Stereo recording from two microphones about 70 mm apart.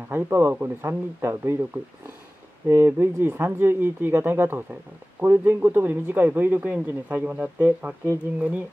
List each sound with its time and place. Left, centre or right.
0.1 s speech: right